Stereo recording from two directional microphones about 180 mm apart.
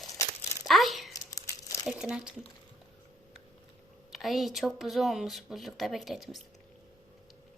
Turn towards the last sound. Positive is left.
turn(degrees=0)  # may be behind; listen again after turning